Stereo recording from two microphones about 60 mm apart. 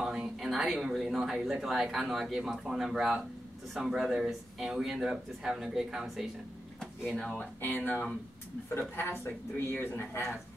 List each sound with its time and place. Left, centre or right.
0.0 s speech: centre
6.8 s speech: centre
7.6 s speech: left